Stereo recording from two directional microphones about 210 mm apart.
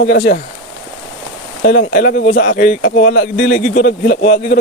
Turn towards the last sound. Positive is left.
turn(degrees=35)  # may be behind; listen again after turning